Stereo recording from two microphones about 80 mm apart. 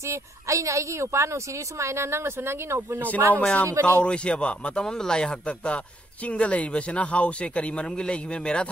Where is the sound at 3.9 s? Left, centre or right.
Centre.